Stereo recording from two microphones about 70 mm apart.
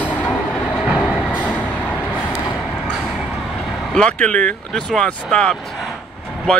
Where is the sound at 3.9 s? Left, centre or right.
Centre.